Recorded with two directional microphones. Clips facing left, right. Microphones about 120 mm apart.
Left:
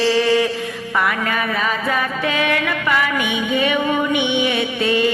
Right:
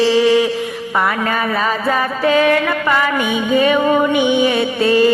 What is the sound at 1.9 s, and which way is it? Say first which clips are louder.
Music: right 6 dB; 35° right (ahead or behind).